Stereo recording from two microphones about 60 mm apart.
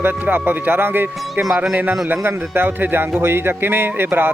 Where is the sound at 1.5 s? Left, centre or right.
Right.